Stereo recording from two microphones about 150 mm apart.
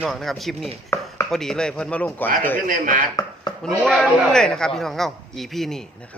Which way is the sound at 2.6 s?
65° right (ahead or behind).